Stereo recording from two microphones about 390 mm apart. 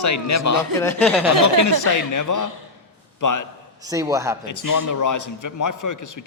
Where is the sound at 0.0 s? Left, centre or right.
Left.